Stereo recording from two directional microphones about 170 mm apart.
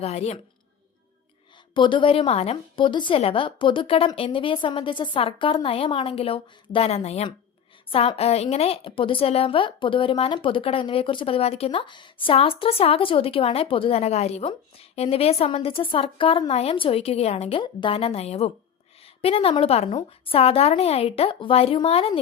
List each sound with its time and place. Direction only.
0.0 s a woman's voice: 40° left (ahead or behind)
1.7 s a woman's voice: 30° left (ahead or behind)